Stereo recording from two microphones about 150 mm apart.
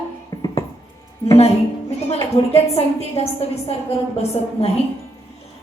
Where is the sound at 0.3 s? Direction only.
25° left (ahead or behind).